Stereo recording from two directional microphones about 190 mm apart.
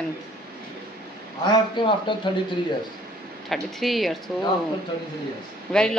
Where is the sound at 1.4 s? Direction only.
25° left (ahead or behind).